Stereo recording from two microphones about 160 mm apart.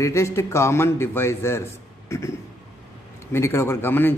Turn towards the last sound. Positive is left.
turn(degrees=15)  # may be behind; listen again after turning